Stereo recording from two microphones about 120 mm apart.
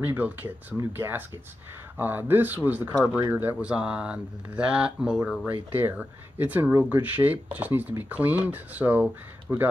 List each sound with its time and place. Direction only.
0.0 s speech: 15° right (ahead or behind)